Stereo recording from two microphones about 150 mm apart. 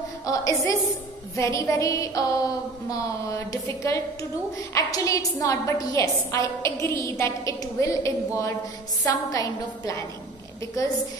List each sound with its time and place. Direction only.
0.3 s a woman's voice: 20° left (ahead or behind)
4.7 s a woman's voice: 20° left (ahead or behind)